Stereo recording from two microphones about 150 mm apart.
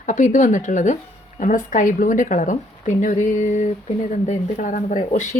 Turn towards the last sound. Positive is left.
turn(degrees=55)  # may be behind; listen again after turning